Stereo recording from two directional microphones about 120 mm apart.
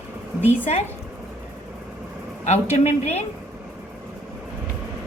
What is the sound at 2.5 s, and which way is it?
Speech, 75° left (ahead or behind).